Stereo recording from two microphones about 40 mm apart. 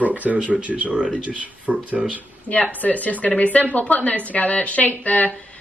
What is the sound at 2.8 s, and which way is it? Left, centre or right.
A woman's voice, left.